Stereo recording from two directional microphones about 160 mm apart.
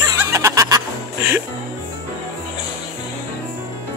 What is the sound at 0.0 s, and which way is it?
Snicker, 20° right (ahead or behind).